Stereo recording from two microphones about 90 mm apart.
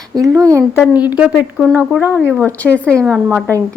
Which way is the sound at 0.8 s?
15° right (ahead or behind).